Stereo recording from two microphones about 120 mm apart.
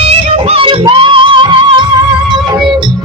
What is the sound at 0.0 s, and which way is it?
Music, 55° right (ahead or behind).